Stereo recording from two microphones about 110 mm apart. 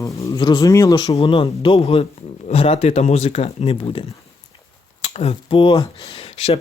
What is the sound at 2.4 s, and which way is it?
Speech, 65° left (ahead or behind).